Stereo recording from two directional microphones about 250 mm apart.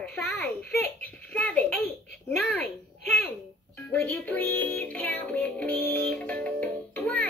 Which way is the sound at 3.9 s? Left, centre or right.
Centre.